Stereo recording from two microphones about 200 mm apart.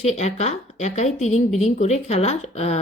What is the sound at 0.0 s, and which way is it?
Speech, 35° left (ahead or behind).